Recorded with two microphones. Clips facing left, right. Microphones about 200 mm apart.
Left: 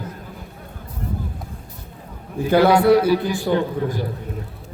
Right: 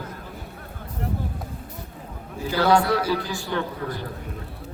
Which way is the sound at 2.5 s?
60° left (ahead or behind).